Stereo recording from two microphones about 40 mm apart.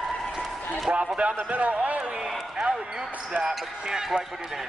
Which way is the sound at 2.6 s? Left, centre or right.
Centre.